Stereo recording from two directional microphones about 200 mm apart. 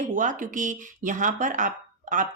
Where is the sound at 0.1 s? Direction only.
40° right (ahead or behind).